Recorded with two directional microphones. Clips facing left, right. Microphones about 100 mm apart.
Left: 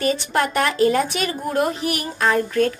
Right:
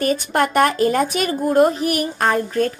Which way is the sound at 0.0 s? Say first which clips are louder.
Right 2 dB; 45° right (ahead or behind).